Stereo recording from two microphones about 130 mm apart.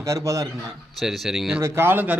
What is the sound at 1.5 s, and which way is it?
Speech, 20° right (ahead or behind).